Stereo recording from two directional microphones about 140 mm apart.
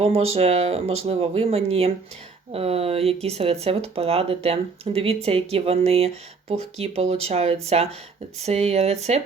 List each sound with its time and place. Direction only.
0.0 s speech: 45° right (ahead or behind)